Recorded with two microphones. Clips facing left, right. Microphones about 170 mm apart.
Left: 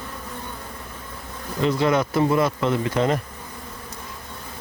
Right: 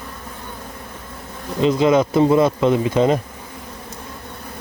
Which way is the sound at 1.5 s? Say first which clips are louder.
Right 5 dB; 20° right (ahead or behind).